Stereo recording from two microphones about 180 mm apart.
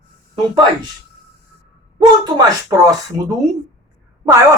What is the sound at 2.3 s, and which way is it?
Speech, 20° right (ahead or behind).